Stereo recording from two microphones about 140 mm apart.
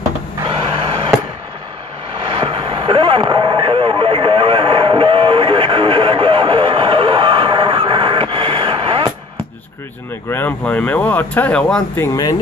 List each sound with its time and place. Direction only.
2.2 s vehicle: 35° right (ahead or behind)
10.3 s speech: 10° left (ahead or behind)
12.1 s speech: 25° left (ahead or behind)